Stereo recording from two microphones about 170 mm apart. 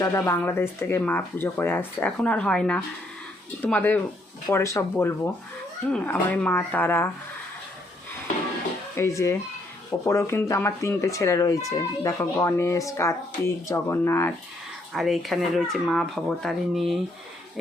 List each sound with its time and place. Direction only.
0.0 s speech: 15° left (ahead or behind)
9.0 s speech: 15° left (ahead or behind)
14.9 s speech: centre (ahead or behind)